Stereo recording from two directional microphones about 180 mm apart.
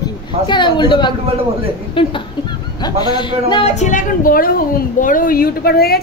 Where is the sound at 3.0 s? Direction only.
25° left (ahead or behind).